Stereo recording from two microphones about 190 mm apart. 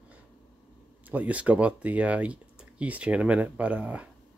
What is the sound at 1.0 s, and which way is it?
Speech, 10° right (ahead or behind).